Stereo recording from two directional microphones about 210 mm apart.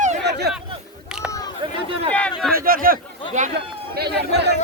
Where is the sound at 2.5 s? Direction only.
45° right (ahead or behind).